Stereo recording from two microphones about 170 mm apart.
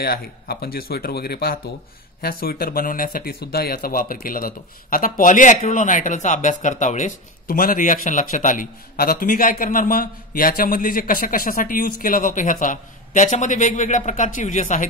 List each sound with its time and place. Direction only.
0.0 s speech: 65° left (ahead or behind); by 14.9 s 50° left (ahead or behind)